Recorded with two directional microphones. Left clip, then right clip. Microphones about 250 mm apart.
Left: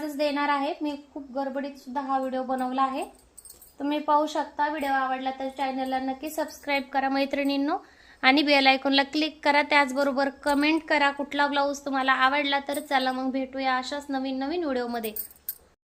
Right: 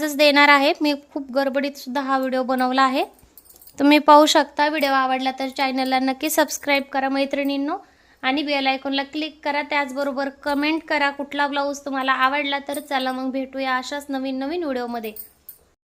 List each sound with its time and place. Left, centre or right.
0.0 s a woman's voice: right; by 7.8 s centre
8.2 s a woman's voice: centre